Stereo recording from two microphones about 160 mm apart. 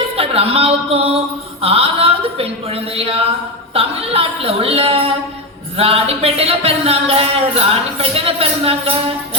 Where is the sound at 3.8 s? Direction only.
35° right (ahead or behind).